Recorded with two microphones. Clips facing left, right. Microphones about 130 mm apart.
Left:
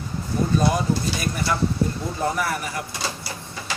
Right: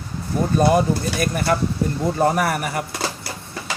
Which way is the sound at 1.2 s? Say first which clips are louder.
Right 4 dB; 55° right (ahead or behind).